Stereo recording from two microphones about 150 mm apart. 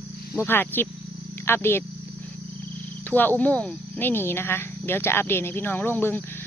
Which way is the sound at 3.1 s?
10° left (ahead or behind).